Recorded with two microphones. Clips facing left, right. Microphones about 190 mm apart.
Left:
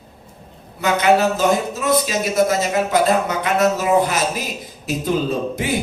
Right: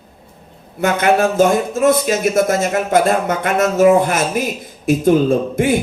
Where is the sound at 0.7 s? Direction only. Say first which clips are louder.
Right 1 dB; 50° right (ahead or behind).